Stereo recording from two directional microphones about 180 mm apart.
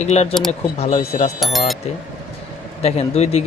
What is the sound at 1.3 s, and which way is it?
Speech, centre (ahead or behind).